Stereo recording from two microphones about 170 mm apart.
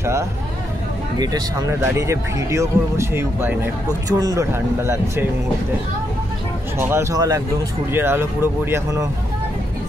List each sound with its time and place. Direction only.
0.0 s speech: 15° right (ahead or behind)
6.8 s speech: 15° right (ahead or behind)